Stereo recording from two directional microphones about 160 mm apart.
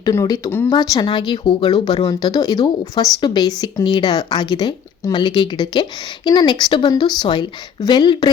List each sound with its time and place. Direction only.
0.0 s speech: 20° left (ahead or behind)